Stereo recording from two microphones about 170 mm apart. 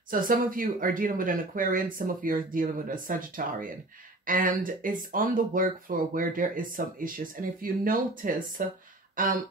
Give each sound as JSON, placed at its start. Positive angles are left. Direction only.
{"t": 0.1, "sound": "speech", "side_deg": -55}